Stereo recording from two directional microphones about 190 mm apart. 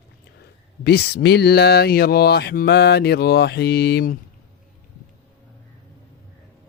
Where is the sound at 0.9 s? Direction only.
55° left (ahead or behind).